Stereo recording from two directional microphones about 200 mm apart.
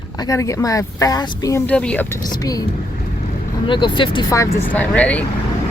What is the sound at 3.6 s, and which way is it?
Speech, 25° left (ahead or behind).